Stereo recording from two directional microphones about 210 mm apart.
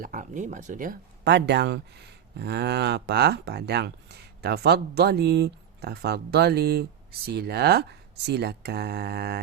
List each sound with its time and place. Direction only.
0.0 s speech: 40° right (ahead or behind)